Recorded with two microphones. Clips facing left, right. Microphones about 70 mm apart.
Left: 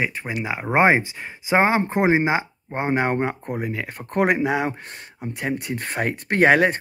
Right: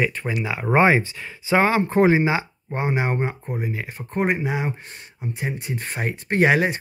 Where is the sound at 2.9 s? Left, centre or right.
Left.